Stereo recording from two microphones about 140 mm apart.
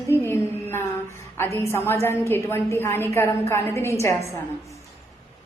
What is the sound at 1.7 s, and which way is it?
A woman's voice, 15° left (ahead or behind).